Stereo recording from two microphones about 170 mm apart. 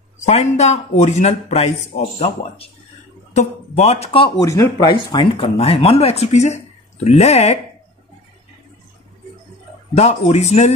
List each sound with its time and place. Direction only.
0.2 s speech: 40° left (ahead or behind)
4.4 s speech: 20° left (ahead or behind); by 7.5 s 40° left (ahead or behind)
9.9 s speech: 40° left (ahead or behind)